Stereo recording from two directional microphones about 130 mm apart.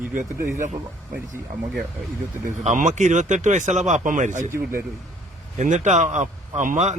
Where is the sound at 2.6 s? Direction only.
65° right (ahead or behind).